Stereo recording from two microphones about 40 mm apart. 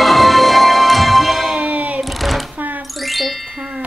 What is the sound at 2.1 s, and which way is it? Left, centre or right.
Sewing machine, centre.